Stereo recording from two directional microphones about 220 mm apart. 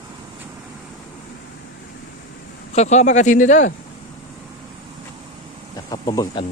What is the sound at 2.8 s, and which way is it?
Speech, 30° left (ahead or behind).